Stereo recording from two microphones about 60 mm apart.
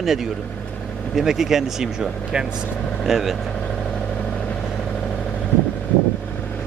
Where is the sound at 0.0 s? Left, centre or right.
Centre.